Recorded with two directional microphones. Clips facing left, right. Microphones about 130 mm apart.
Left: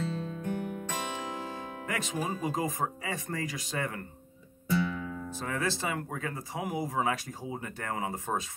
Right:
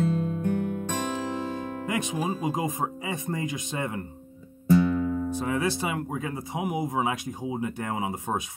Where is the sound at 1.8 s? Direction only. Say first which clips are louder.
Right 4 dB; 20° right (ahead or behind).